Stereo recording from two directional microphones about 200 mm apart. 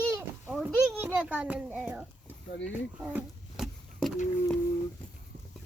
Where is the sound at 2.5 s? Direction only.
65° left (ahead or behind).